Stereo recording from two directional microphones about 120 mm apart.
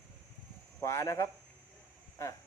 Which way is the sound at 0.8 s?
25° left (ahead or behind).